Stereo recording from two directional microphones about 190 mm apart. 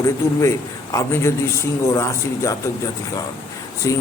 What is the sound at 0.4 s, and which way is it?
A man's voice, 15° left (ahead or behind).